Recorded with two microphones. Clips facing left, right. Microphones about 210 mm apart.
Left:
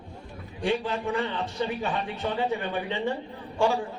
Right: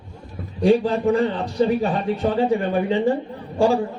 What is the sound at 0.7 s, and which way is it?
A man's voice, 40° right (ahead or behind).